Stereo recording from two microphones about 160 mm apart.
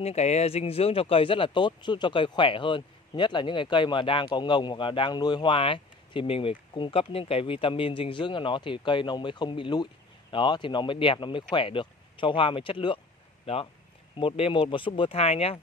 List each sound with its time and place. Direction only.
0.0 s speech: 45° left (ahead or behind)